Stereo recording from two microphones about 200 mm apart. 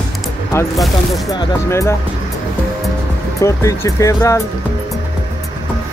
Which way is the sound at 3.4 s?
15° left (ahead or behind).